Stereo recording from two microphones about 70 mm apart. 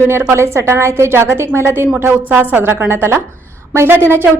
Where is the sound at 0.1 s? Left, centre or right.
Right.